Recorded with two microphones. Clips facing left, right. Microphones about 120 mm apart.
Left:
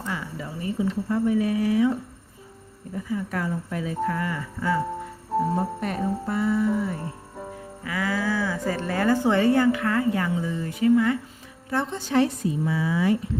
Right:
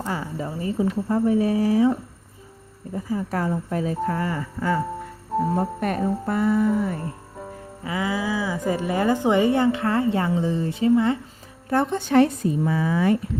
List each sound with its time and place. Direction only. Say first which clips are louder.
0.0 s speech: right 4 dB; 35° right (ahead or behind)
2.9 s speech: right 3 dB; 35° right (ahead or behind)
5.5 s a woman's voice: right 3 dB; 55° right (ahead or behind)
7.9 s speech: right 1 dB; 20° right (ahead or behind)
11.7 s a woman's voice: right 5 dB; 55° right (ahead or behind)